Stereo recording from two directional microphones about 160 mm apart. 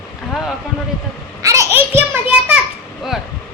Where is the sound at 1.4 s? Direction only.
20° right (ahead or behind).